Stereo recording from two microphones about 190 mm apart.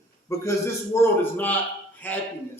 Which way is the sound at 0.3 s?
15° left (ahead or behind).